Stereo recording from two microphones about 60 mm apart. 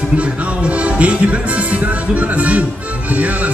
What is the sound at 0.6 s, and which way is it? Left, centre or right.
Music, right.